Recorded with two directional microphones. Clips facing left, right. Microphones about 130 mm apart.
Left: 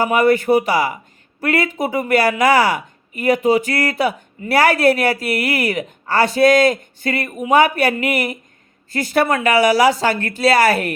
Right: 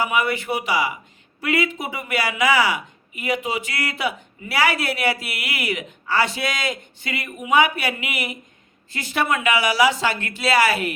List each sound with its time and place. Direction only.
0.0 s speech: 45° left (ahead or behind)